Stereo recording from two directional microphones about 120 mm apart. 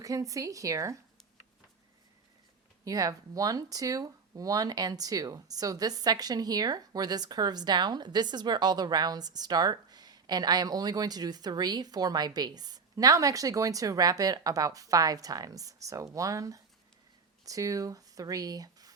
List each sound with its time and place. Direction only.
0.0 s speech: 30° right (ahead or behind)
2.8 s speech: 30° right (ahead or behind)